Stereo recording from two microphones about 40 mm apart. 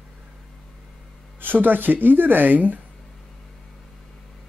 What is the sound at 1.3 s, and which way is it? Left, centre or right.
Speech, right.